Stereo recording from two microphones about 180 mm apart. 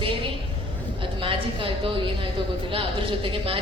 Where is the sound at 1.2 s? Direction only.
30° right (ahead or behind).